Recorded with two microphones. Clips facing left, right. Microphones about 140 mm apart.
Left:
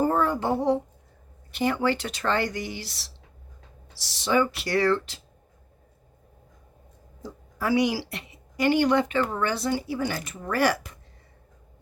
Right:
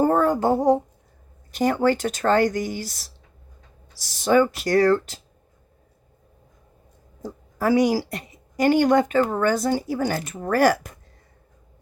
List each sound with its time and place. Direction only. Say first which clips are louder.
0.0 s a sound: right 5 dB; 45° right (ahead or behind)
1.5 s a woman's voice: right 4 dB; 45° right (ahead or behind)
7.2 s a woman's voice: right 5 dB; 45° right (ahead or behind)